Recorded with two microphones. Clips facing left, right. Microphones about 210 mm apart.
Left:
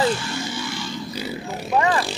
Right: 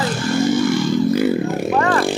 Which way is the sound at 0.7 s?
55° right (ahead or behind).